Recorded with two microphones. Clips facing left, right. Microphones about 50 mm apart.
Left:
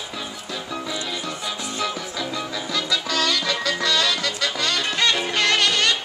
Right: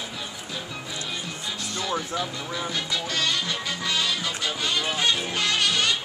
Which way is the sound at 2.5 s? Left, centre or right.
Left.